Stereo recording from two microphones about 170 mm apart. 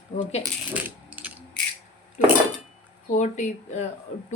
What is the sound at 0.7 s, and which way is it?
Coin, 10° right (ahead or behind).